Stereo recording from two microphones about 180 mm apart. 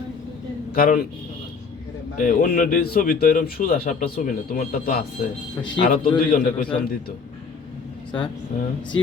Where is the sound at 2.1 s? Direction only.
50° left (ahead or behind).